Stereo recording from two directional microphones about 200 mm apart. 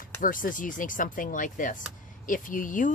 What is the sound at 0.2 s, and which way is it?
Speech, 45° left (ahead or behind).